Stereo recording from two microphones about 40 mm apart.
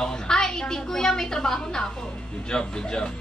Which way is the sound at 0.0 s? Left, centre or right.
Centre.